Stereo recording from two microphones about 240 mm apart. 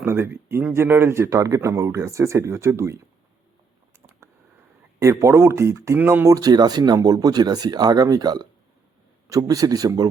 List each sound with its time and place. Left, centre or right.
0.0 s speech: centre
3.9 s a sound: centre
4.9 s speech: centre